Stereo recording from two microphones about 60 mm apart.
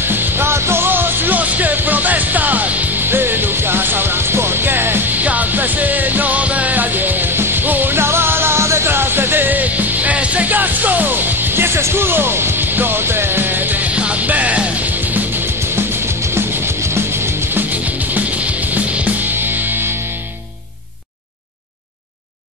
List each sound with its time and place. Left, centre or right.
0.1 s music: right
13.9 s music: right
16.3 s music: right
17.6 s music: right
19.3 s music: right